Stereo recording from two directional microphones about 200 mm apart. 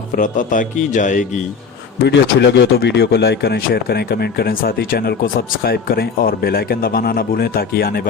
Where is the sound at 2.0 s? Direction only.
60° left (ahead or behind).